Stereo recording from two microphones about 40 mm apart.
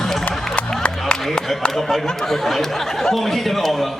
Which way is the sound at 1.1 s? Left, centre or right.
Left.